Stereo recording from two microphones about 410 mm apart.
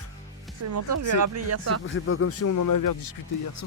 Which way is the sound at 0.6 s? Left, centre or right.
Right.